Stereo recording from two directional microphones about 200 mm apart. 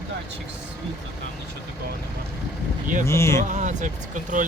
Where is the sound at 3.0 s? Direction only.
15° left (ahead or behind).